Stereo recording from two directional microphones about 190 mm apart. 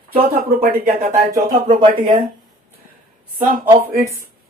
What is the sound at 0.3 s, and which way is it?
Speech, 50° right (ahead or behind).